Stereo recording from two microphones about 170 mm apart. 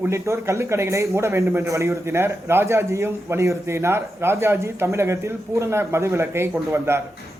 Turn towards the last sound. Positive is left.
turn(degrees=-15)  # may be behind; listen again after turning